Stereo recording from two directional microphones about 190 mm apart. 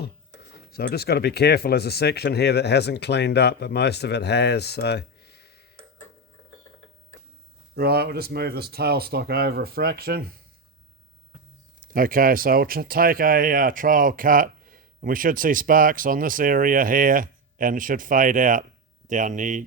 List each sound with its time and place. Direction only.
0.5 s speech: 55° left (ahead or behind)
7.8 s speech: 55° right (ahead or behind)
11.8 s speech: 45° right (ahead or behind)